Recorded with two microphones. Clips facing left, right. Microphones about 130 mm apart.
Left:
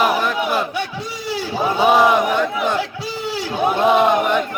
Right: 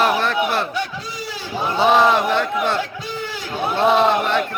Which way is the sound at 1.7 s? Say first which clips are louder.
Left 1 dB; 10° left (ahead or behind).